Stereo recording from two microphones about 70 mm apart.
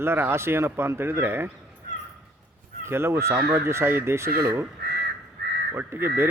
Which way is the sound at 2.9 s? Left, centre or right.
Right.